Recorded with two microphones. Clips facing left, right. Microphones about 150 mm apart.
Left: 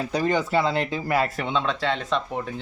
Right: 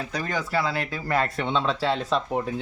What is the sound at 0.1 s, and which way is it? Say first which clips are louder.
Speech: left 7 dB; 30° left (ahead or behind).